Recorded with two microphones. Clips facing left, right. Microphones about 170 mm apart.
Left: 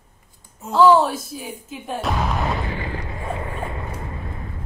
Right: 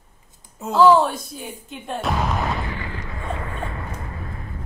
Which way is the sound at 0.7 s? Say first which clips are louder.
Even; centre (ahead or behind).